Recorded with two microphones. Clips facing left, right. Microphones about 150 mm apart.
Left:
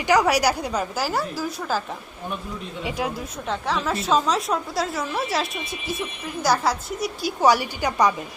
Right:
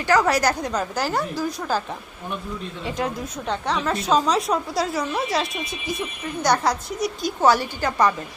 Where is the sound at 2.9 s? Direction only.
10° left (ahead or behind).